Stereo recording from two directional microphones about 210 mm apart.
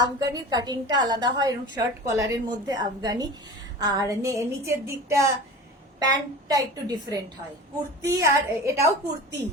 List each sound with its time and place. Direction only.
0.0 s a woman's voice: 20° right (ahead or behind)